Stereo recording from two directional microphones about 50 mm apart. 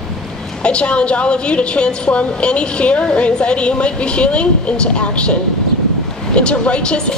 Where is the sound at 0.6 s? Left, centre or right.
Left.